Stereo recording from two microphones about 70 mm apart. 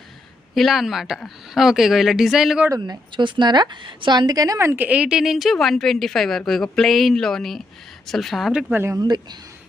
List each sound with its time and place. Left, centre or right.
0.5 s a woman's voice: centre
2.7 s speech: right
3.2 s speech: right
4.8 s a woman's voice: centre
8.7 s speech: right
9.0 s speech: right